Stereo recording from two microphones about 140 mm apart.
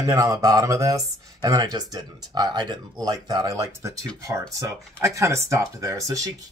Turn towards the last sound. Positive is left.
turn(degrees=-25)  # may be behind; listen again after turning